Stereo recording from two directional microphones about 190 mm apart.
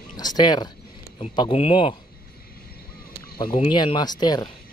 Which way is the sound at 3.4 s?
25° left (ahead or behind).